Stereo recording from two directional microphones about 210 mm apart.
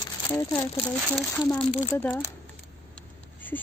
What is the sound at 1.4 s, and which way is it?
Speech, 15° left (ahead or behind).